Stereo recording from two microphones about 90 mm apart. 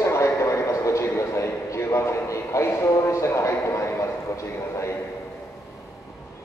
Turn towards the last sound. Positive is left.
turn(degrees=30)  # may be behind; listen again after turning